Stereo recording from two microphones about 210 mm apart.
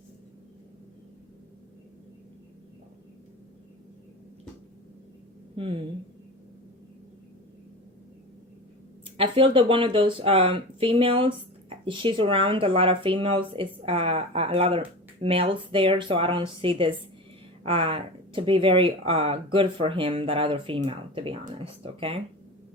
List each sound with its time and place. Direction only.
5.6 s speech: 25° right (ahead or behind)
9.1 s speech: 25° right (ahead or behind)